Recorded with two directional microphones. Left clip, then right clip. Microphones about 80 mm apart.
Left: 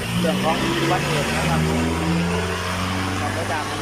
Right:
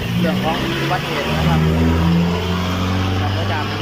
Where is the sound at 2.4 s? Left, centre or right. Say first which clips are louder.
Right 2 dB; right; by 3.7 s centre.